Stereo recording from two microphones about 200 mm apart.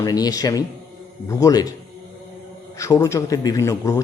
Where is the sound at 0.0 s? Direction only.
20° left (ahead or behind).